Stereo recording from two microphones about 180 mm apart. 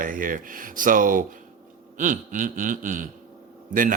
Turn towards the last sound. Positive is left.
turn(degrees=-50)  # may be behind; listen again after turning